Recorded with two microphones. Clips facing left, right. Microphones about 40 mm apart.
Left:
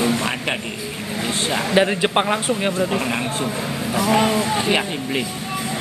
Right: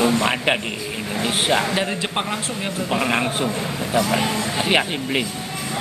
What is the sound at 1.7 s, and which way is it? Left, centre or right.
A man's voice, centre.